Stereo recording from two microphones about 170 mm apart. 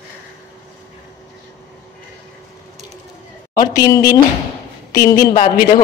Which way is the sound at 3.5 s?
20° left (ahead or behind).